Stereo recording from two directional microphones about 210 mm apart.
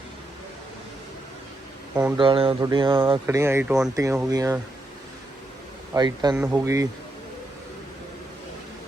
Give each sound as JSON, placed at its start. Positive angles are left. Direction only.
{"t": 2.1, "sound": "speech", "side_deg": -25}
{"t": 5.9, "sound": "a man's voice", "side_deg": -20}